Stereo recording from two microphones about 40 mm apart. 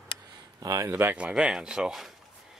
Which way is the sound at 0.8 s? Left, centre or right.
Right.